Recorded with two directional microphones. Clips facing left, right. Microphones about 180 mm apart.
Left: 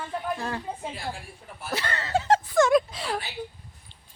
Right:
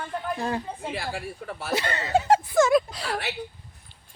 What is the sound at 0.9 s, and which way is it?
Speech, 75° right (ahead or behind).